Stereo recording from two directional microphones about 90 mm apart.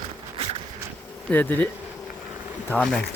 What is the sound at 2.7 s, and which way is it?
Speech, 15° left (ahead or behind).